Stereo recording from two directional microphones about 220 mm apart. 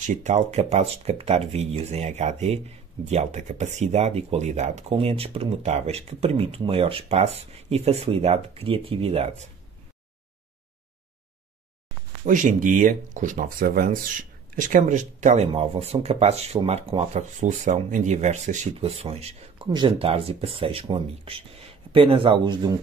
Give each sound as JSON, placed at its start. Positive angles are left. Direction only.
{"t": 0.0, "sound": "speech", "side_deg": -35}
{"t": 12.3, "sound": "speech", "side_deg": -35}